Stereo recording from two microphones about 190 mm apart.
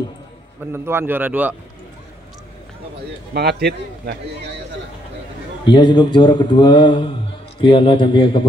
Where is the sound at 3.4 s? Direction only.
55° right (ahead or behind).